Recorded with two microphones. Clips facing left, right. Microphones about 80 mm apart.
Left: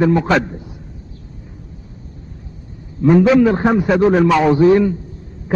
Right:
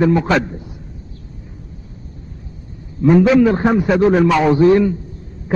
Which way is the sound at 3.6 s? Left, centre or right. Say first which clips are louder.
Even; left.